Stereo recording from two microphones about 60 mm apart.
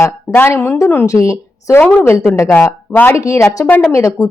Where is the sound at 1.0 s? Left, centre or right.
Left.